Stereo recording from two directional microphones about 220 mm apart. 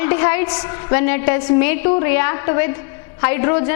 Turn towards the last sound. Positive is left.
turn(degrees=10)  # may be behind; listen again after turning